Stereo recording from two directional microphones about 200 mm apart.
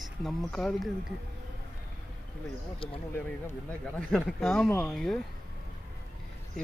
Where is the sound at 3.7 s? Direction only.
5° left (ahead or behind).